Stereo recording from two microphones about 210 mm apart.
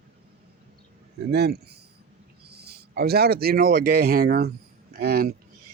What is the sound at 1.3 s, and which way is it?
Speech, 50° right (ahead or behind).